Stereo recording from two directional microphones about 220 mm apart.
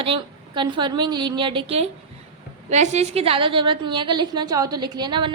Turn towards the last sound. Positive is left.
turn(degrees=-20)  # may be behind; listen again after turning